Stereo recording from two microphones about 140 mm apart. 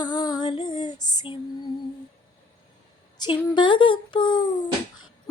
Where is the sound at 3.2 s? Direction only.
30° left (ahead or behind).